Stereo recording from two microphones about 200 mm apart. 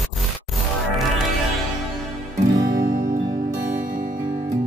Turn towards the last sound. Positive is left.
turn(degrees=-15)  # may be behind; listen again after turning